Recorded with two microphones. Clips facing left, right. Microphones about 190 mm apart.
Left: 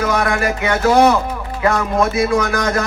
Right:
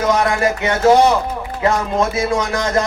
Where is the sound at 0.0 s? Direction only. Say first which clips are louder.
Right 2 dB; 25° right (ahead or behind).